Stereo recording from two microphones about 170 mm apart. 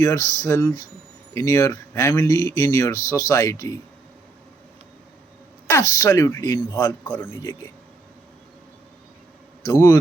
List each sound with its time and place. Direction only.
0.0 s speech: 20° left (ahead or behind)
5.6 s speech: 20° left (ahead or behind)
9.6 s speech: 20° left (ahead or behind)